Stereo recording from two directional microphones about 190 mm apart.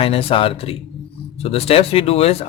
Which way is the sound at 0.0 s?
30° left (ahead or behind).